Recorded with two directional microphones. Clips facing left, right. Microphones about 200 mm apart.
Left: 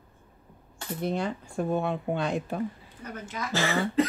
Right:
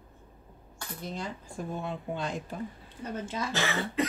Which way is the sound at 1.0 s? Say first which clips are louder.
Left 8 dB; 65° left (ahead or behind).